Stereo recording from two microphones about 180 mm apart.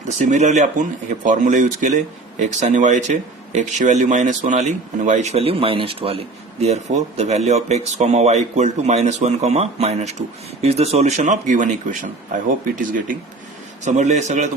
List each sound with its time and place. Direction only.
0.2 s speech: 40° right (ahead or behind)